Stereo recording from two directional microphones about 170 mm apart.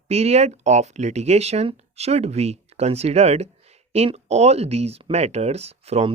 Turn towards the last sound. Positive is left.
turn(degrees=-40)  # may be behind; listen again after turning